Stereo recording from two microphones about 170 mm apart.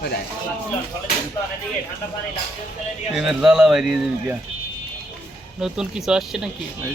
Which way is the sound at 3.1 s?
5° right (ahead or behind).